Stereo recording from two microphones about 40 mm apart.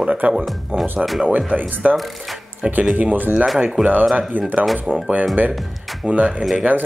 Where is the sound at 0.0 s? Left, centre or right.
Right.